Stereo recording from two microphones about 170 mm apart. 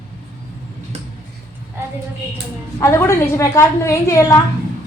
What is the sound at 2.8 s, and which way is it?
A woman's voice, 15° left (ahead or behind).